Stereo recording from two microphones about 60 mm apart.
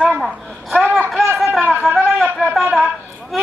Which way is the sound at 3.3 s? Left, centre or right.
Centre.